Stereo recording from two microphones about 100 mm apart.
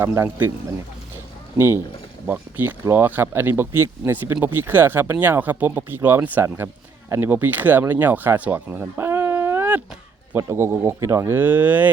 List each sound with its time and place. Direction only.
0.0 s speech: 25° right (ahead or behind)
1.1 s a sound: 25° right (ahead or behind)
2.2 s speech: 20° right (ahead or behind)